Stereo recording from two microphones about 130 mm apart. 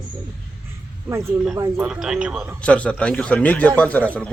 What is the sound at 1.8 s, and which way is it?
Speech, 5° right (ahead or behind).